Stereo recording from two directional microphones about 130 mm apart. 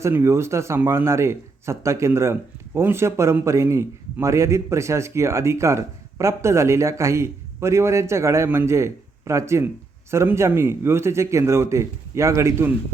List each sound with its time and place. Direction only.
0.0 s a man's voice: 20° right (ahead or behind)